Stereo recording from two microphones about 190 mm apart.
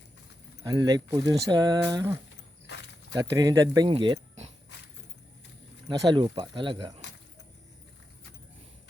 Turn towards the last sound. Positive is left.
turn(degrees=-25)  # may be behind; listen again after turning